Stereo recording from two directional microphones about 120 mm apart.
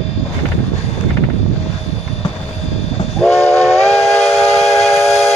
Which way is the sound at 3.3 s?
60° left (ahead or behind).